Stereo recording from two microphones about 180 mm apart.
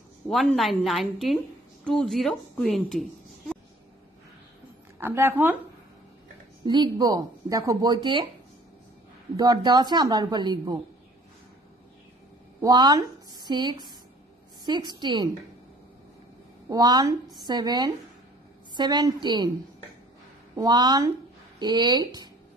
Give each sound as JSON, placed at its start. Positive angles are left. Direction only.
{"t": 0.3, "sound": "a woman's voice", "side_deg": 0}
{"t": 5.0, "sound": "speech", "side_deg": -10}
{"t": 6.6, "sound": "speech", "side_deg": -25}
{"t": 9.4, "sound": "speech", "side_deg": -20}
{"t": 12.6, "sound": "speech", "side_deg": -20}
{"t": 16.6, "sound": "speech", "side_deg": -20}
{"t": 20.5, "sound": "speech", "side_deg": -20}